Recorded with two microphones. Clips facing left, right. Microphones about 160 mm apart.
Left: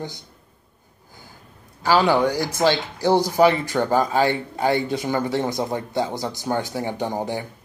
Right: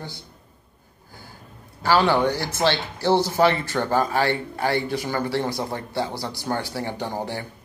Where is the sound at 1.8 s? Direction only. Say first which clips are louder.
Left 1 dB; 10° left (ahead or behind).